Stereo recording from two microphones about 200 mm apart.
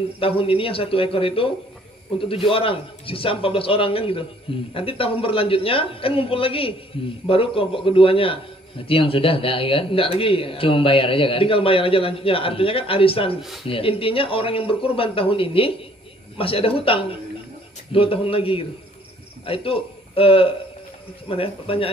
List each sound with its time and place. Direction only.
0.2 s a man's voice: 30° left (ahead or behind)